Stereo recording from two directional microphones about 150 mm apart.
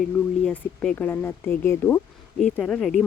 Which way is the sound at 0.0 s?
5° left (ahead or behind).